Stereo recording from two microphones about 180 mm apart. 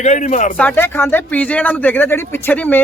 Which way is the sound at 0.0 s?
40° left (ahead or behind).